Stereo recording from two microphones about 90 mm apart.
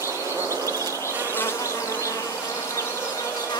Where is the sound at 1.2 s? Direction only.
25° left (ahead or behind).